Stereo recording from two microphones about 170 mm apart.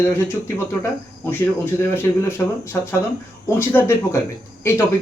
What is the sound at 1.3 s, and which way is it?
Speech, 10° left (ahead or behind).